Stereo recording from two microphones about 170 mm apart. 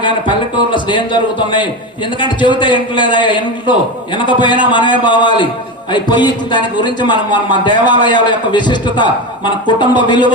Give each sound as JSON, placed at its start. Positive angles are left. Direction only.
{"t": 0.0, "sound": "a man's voice", "side_deg": 30}